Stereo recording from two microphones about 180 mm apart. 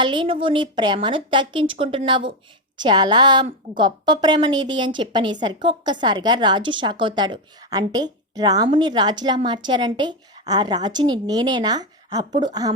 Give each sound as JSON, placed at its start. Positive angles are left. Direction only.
{"t": 0.0, "sound": "a woman's voice", "side_deg": -25}